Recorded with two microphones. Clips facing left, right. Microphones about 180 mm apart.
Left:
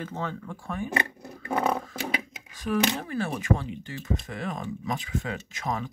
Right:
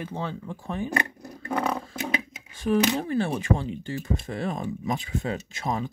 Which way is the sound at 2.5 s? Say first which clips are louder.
Right 4 dB; 30° right (ahead or behind).